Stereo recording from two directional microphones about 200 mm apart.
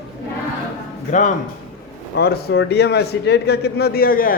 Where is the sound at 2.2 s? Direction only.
50° left (ahead or behind).